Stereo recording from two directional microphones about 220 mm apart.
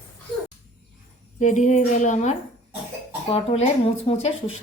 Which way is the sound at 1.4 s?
35° left (ahead or behind).